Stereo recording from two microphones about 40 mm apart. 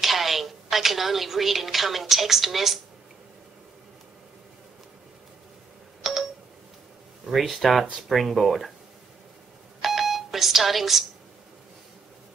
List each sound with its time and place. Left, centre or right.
0.0 s a woman's voice: centre
6.0 s telephone dialing: centre
7.3 s speech: centre
9.8 s doorbell: centre